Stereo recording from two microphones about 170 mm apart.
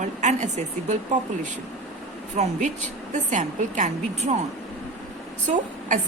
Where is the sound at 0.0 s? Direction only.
45° right (ahead or behind).